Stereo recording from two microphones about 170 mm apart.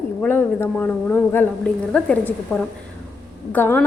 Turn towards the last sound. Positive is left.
turn(degrees=10)  # may be behind; listen again after turning